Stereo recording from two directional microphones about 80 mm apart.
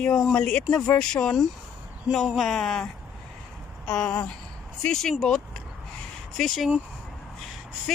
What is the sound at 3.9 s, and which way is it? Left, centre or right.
A woman's voice, centre.